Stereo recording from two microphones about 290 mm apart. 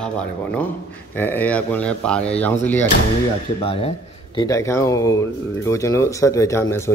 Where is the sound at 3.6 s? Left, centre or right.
Centre.